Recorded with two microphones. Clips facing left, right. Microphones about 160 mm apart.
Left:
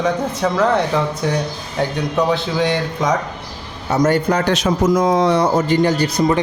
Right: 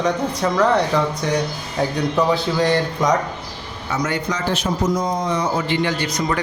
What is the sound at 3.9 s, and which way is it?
Speech, 45° left (ahead or behind).